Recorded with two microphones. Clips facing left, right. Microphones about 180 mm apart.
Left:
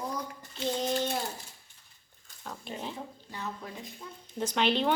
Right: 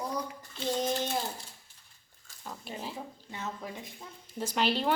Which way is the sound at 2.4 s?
5° right (ahead or behind).